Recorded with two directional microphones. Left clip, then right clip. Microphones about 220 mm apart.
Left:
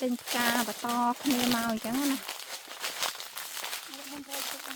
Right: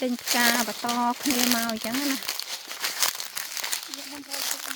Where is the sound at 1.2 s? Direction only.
50° right (ahead or behind).